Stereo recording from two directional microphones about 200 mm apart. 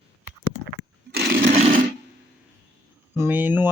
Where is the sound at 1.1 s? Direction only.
50° right (ahead or behind).